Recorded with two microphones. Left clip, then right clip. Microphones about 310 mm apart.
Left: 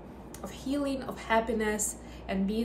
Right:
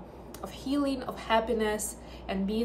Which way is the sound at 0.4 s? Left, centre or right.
Centre.